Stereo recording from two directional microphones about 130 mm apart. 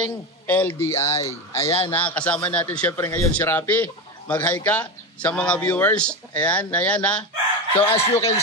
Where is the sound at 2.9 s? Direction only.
20° left (ahead or behind).